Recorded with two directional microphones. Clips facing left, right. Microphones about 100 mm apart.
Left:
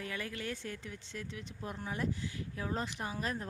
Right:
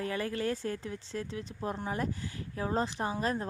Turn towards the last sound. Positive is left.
turn(degrees=-35)  # may be behind; listen again after turning